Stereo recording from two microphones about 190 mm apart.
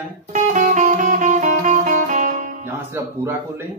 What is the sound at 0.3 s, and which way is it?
Music, 40° right (ahead or behind).